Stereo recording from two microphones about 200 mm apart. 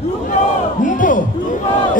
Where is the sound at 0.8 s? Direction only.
40° left (ahead or behind).